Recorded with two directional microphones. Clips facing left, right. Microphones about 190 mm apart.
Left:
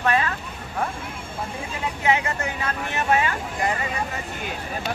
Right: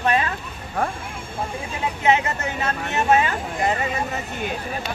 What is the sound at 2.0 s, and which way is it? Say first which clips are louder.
Speech: right 3 dB; 25° right (ahead or behind).